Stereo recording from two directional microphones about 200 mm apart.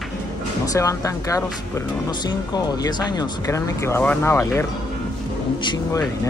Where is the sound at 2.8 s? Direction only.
20° left (ahead or behind).